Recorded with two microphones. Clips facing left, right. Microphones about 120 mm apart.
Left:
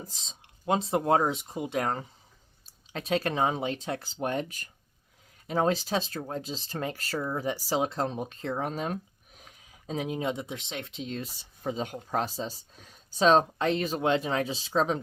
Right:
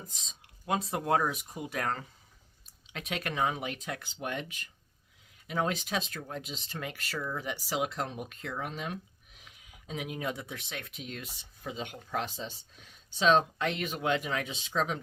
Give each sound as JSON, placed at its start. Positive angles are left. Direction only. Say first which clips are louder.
{"t": 0.0, "sound": "speech", "louder": "left 4 dB", "side_deg": 30}
{"t": 2.6, "sound": "speech", "louder": "left 8 dB", "side_deg": 35}